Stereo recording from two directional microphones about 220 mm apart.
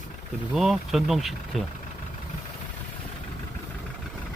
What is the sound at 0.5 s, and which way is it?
Speech, centre (ahead or behind).